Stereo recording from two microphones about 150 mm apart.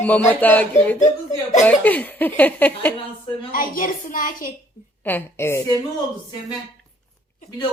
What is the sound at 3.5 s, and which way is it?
A woman's voice, 70° left (ahead or behind).